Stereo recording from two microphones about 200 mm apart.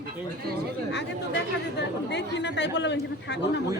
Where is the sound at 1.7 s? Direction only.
60° left (ahead or behind).